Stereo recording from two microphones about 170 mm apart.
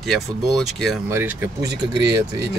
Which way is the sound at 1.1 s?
10° right (ahead or behind).